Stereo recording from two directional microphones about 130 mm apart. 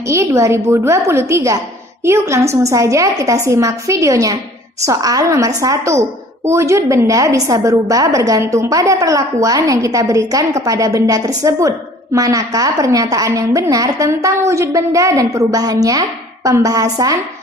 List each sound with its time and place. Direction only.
0.1 s a woman's voice: 20° right (ahead or behind)